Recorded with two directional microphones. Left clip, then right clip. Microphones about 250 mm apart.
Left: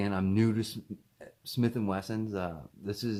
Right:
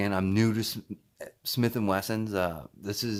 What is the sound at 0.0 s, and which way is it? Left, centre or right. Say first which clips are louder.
Speech: right 3 dB; right.